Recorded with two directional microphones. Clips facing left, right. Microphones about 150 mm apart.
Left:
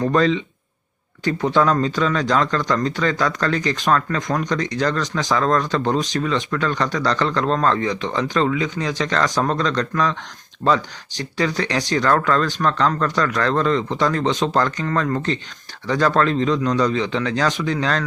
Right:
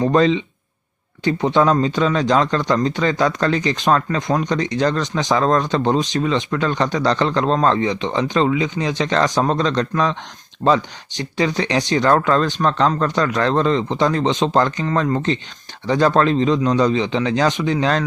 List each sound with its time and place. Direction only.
0.1 s speech: 25° right (ahead or behind)
11.3 s speech: 25° right (ahead or behind)
15.9 s speech: 25° right (ahead or behind)